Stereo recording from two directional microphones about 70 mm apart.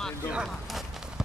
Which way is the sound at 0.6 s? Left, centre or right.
Centre.